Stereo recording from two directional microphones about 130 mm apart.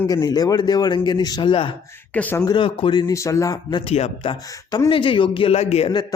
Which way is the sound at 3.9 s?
55° left (ahead or behind).